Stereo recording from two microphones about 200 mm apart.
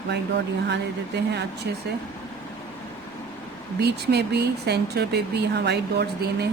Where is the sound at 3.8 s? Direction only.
55° right (ahead or behind).